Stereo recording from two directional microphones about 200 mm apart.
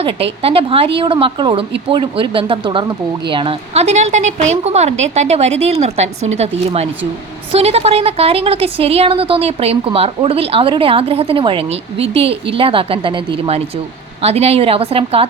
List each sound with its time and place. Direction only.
0.0 s a woman's voice: 25° right (ahead or behind)
7.5 s a woman's voice: 30° right (ahead or behind)